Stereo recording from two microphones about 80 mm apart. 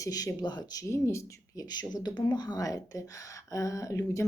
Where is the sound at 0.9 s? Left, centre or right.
Left.